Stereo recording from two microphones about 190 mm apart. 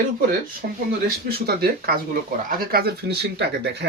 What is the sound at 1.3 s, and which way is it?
Speech, 55° right (ahead or behind).